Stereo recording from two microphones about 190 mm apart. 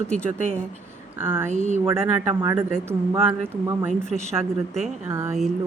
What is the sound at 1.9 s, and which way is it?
Speech, 15° right (ahead or behind).